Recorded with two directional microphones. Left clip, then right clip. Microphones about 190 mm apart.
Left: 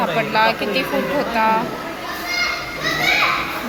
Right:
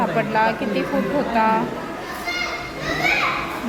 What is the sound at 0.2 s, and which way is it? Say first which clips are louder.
Speech: left 4 dB; 15° right (ahead or behind).